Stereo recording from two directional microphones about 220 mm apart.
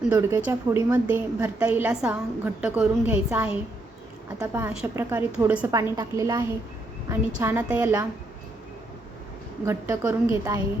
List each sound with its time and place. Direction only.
0.0 s a woman's voice: 10° right (ahead or behind)
9.6 s a woman's voice: 10° right (ahead or behind)